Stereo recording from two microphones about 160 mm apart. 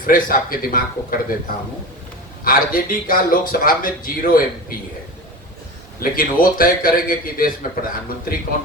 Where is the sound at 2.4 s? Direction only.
60° left (ahead or behind).